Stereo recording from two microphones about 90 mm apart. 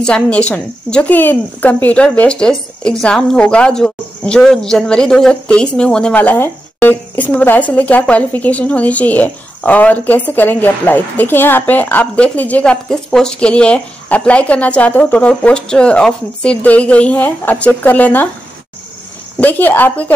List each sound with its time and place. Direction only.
0.0 s a woman's voice: 10° left (ahead or behind)
19.4 s speech: 20° left (ahead or behind)